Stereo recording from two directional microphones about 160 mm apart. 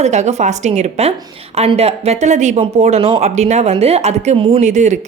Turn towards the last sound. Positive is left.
turn(degrees=-50)  # may be behind; listen again after turning